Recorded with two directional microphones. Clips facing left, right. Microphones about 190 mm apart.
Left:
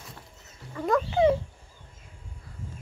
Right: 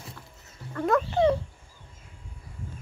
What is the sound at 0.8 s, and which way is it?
Dog, centre (ahead or behind).